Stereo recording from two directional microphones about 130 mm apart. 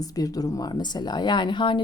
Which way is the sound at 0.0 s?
30° left (ahead or behind).